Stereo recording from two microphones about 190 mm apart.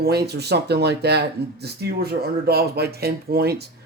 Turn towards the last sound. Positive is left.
turn(degrees=-55)  # may be behind; listen again after turning